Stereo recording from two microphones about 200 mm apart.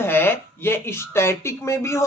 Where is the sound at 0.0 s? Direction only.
10° left (ahead or behind).